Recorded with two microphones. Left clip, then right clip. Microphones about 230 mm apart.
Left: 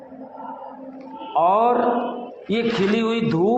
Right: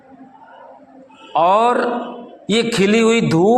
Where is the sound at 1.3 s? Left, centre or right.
Right.